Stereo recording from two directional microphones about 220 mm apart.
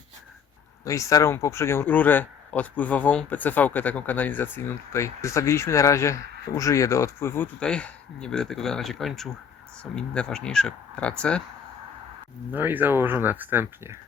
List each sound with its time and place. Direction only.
0.9 s speech: 15° left (ahead or behind)
12.5 s speech: 10° right (ahead or behind)